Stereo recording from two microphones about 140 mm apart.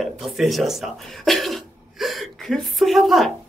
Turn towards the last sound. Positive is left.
turn(degrees=0)  # may be behind; listen again after turning